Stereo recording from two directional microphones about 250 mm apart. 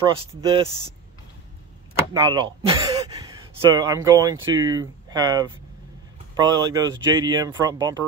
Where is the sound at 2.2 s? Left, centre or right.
Centre.